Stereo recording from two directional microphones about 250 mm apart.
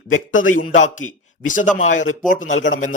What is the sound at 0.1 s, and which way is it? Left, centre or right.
Speech, left.